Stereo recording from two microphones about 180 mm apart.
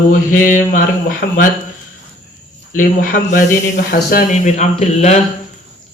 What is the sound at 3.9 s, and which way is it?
A man's voice, 50° left (ahead or behind).